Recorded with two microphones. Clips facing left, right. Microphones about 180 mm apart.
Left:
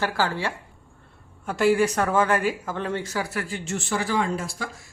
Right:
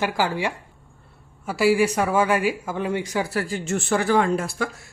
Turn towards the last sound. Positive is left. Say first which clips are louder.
# right 5 dB
turn(degrees=-60)  # may be behind; listen again after turning